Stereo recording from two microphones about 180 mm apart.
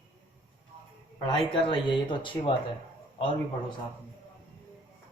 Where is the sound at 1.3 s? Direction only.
25° left (ahead or behind).